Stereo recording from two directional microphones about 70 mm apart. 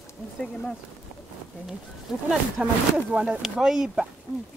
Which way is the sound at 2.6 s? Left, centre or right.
Centre.